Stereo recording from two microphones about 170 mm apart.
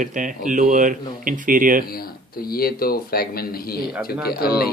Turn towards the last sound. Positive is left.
turn(degrees=65)  # may be behind; listen again after turning